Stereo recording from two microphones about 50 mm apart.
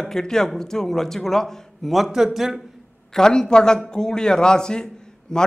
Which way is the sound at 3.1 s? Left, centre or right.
Centre.